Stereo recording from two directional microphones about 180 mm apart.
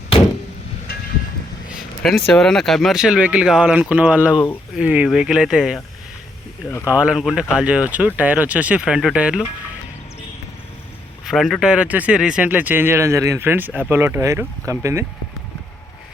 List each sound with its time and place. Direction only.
2.0 s speech: 5° left (ahead or behind)
6.7 s speech: 15° left (ahead or behind)
7.0 s speech: 5° right (ahead or behind)
11.3 s speech: centre (ahead or behind); by 15.0 s 15° right (ahead or behind)